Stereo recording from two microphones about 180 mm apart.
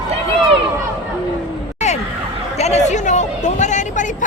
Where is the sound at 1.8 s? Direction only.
40° left (ahead or behind).